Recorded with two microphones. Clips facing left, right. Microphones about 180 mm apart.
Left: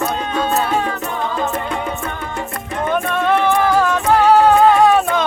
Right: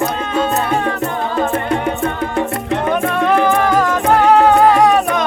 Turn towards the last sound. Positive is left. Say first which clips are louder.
# right 1 dB
turn(degrees=0)  # may be behind; listen again after turning